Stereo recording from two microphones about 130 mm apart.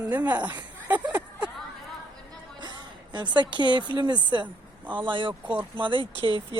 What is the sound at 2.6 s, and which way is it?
Music, 35° right (ahead or behind).